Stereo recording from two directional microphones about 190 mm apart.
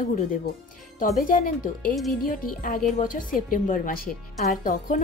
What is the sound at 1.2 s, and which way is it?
Speech, 45° left (ahead or behind).